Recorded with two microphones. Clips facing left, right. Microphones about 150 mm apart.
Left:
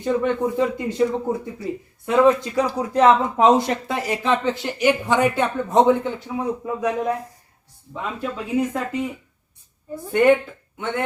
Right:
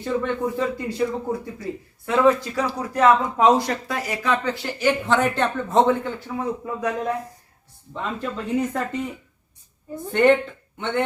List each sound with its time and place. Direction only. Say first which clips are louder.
0.0 s speech: left 3 dB; 15° left (ahead or behind)